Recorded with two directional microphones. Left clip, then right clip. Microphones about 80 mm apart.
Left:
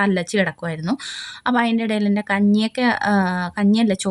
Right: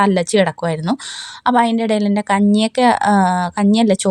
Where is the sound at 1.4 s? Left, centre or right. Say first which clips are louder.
Right 5 dB; right.